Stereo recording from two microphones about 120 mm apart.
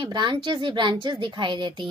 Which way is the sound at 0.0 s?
40° right (ahead or behind).